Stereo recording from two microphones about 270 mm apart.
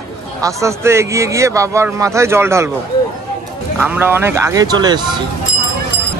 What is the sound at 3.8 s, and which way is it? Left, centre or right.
A man's voice, centre.